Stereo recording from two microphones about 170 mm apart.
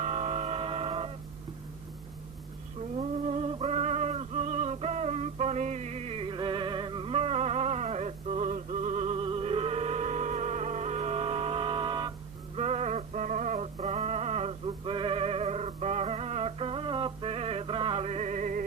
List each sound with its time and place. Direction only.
0.0 s music: 40° right (ahead or behind)
3.0 s a sound: 40° right (ahead or behind)
12.5 s music: 40° right (ahead or behind)